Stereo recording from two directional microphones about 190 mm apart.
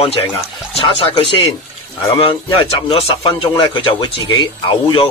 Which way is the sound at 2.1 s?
30° left (ahead or behind).